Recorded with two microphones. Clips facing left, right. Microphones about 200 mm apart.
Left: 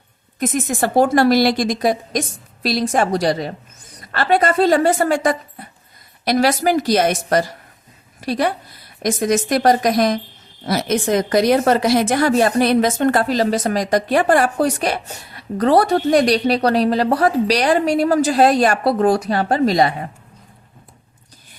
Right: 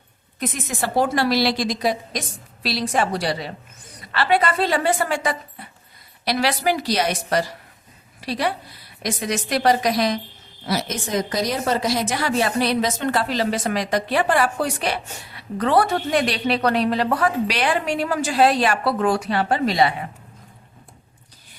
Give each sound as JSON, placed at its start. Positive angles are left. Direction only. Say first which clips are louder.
{"t": 0.3, "sound": "a woman's voice", "louder": "left 7 dB", "side_deg": 50}